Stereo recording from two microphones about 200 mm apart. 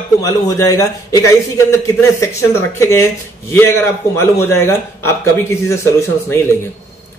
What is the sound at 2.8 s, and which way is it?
A man's voice, 15° left (ahead or behind).